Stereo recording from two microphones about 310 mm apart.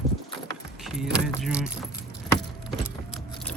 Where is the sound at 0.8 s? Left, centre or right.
Centre.